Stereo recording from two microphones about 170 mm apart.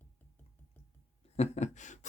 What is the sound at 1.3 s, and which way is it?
Speech, 40° left (ahead or behind).